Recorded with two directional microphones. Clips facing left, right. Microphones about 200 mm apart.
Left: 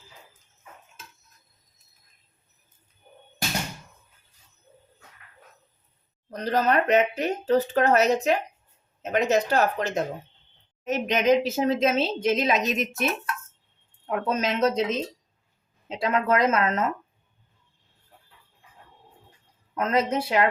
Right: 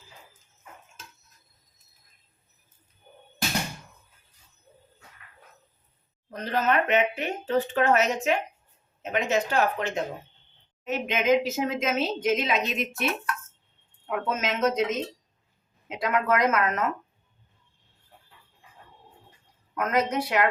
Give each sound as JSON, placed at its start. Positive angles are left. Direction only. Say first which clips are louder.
{"t": 6.3, "sound": "a woman's voice", "louder": "left 2 dB", "side_deg": 40}
{"t": 14.1, "sound": "a woman's voice", "louder": "left 3 dB", "side_deg": 35}
{"t": 19.7, "sound": "speech", "louder": "left 1 dB", "side_deg": 25}